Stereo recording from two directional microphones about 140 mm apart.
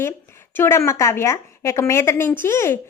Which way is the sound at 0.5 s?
15° left (ahead or behind).